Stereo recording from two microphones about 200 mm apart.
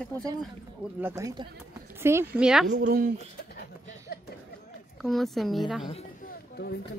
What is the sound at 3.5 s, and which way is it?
Chuckle, 50° left (ahead or behind).